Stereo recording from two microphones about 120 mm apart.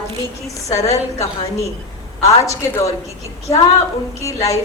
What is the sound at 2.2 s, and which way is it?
Speech, 25° left (ahead or behind).